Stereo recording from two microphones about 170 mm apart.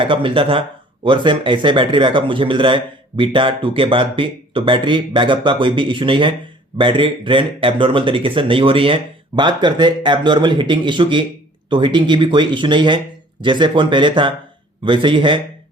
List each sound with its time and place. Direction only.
0.0 s speech: 30° right (ahead or behind)